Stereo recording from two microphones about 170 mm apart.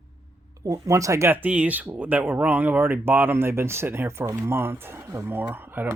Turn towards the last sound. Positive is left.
turn(degrees=-10)  # may be behind; listen again after turning